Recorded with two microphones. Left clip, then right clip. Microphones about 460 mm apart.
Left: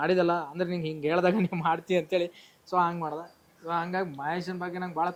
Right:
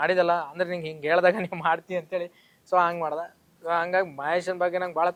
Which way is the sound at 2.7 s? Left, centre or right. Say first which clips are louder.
Right 4 dB; right.